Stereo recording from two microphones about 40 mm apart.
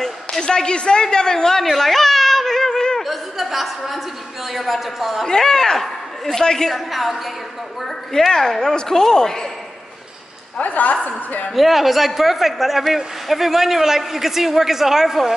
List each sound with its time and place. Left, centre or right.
0.4 s a man's voice: left
1.6 s a sound: centre
3.0 s chuckle: centre
4.5 s a man's voice: centre
5.2 s a man's voice: centre
6.9 s a man's voice: centre
10.6 s a woman's voice: left
11.5 s a man's voice: centre